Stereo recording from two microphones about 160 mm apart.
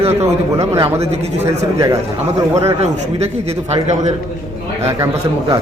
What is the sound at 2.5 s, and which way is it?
Speech, 40° right (ahead or behind).